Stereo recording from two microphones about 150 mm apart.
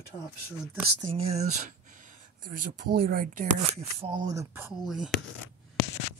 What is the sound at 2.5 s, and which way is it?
Speech, 70° right (ahead or behind).